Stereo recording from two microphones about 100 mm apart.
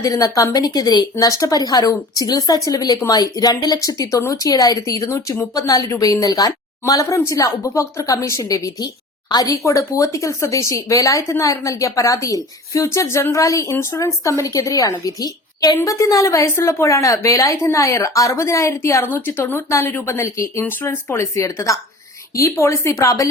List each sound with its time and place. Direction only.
0.0 s a woman's voice: 35° left (ahead or behind)
21.3 s a woman's voice: 35° left (ahead or behind)